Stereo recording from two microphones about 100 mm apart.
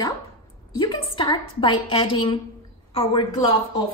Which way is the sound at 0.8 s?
55° left (ahead or behind).